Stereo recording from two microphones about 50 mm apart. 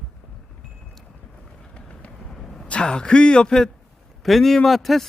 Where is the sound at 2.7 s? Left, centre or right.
Left.